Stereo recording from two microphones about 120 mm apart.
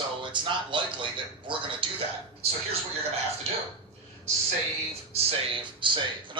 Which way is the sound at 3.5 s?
60° right (ahead or behind).